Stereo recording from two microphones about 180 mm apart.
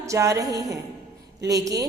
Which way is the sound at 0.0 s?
15° right (ahead or behind).